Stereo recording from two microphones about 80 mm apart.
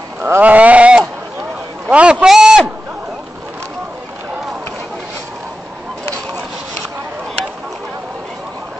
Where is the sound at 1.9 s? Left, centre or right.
Centre.